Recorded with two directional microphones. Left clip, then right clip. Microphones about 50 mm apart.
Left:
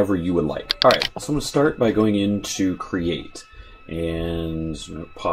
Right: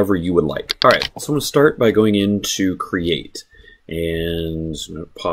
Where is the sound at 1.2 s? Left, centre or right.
Right.